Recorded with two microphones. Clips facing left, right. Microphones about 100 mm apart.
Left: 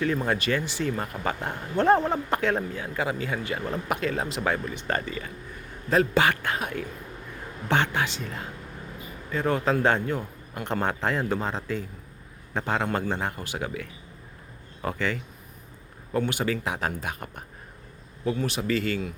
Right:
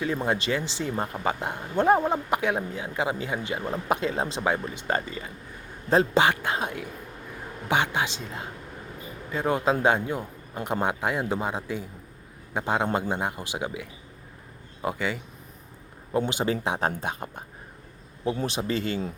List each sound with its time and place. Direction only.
0.0 s speech: 20° right (ahead or behind)
18.4 s speech: 25° right (ahead or behind)